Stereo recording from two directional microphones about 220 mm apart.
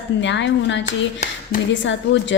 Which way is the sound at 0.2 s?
55° left (ahead or behind).